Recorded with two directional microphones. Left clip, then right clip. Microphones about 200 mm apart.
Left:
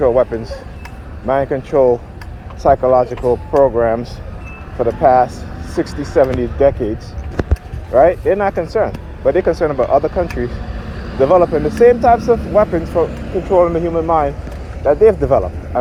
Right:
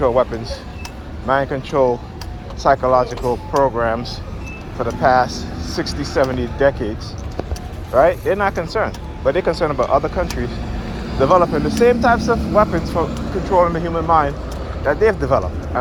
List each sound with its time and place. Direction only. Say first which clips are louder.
0.0 s speech: left 3 dB; 45° left (ahead or behind)
7.9 s speech: left 3 dB; 40° left (ahead or behind)